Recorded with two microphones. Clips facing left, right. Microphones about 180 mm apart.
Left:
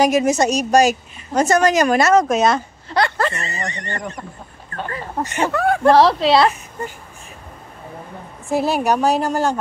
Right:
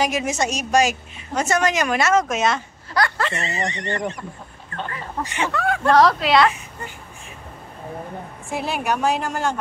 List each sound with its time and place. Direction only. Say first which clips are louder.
0.0 s a woman's voice: left 7 dB; 40° left (ahead or behind)
5.9 s speech: left 2 dB; 30° left (ahead or behind)
8.5 s a woman's voice: left 6 dB; 40° left (ahead or behind)